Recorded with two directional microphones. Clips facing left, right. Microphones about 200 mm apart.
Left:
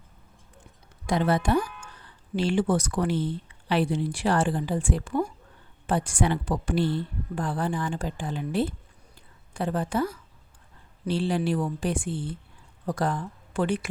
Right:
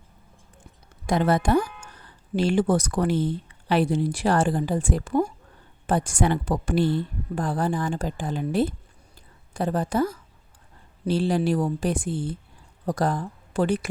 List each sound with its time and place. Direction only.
1.0 s a woman's voice: 45° right (ahead or behind)